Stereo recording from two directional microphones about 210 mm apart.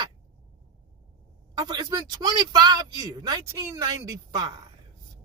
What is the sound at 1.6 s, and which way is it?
Speech, 20° right (ahead or behind).